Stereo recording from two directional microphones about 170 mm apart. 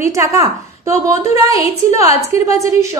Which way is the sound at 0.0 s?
15° right (ahead or behind).